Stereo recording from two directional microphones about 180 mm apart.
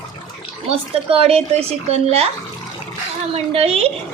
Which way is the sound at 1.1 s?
35° right (ahead or behind).